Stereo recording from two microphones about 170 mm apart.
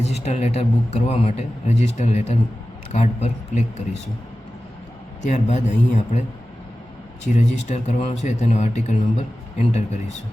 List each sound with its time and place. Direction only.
0.0 s a man's voice: 40° left (ahead or behind)
5.2 s a man's voice: 40° left (ahead or behind)
7.3 s a man's voice: 45° left (ahead or behind)